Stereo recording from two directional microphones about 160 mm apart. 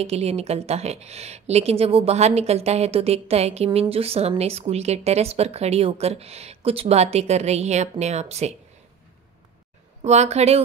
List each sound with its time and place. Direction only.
0.0 s speech: 40° right (ahead or behind)
10.0 s a woman's voice: 45° right (ahead or behind)